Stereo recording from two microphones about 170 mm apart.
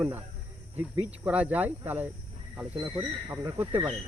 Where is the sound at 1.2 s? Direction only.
10° right (ahead or behind).